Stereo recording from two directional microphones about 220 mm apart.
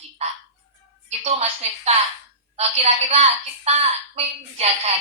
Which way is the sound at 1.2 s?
30° right (ahead or behind).